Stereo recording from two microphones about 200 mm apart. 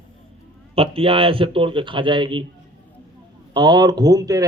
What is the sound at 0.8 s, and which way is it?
Speech, 30° right (ahead or behind).